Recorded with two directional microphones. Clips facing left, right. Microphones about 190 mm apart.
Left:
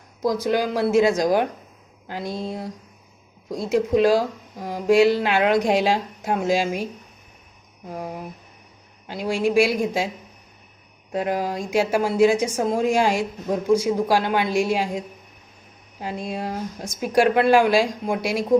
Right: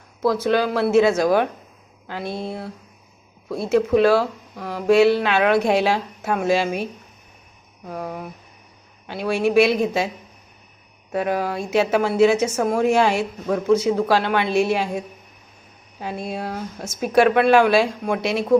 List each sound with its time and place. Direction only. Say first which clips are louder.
0.2 s speech: right 2 dB; 15° left (ahead or behind)
7.9 s speech: right 2 dB; 15° left (ahead or behind)
11.2 s speech: right 1 dB; 15° left (ahead or behind)
16.2 s speech: left 1 dB; 15° left (ahead or behind)